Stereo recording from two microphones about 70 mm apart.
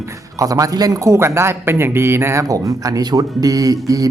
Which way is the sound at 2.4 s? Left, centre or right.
Right.